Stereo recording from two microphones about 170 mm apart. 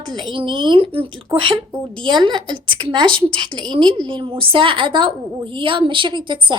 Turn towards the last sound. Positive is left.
turn(degrees=-30)  # may be behind; listen again after turning